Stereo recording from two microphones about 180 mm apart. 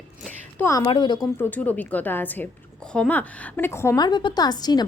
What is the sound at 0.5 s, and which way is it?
Speech, 15° left (ahead or behind).